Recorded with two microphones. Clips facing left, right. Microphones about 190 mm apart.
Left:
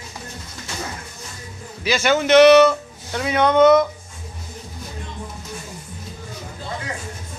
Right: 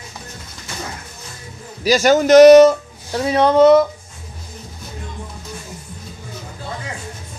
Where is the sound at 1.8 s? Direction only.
40° right (ahead or behind).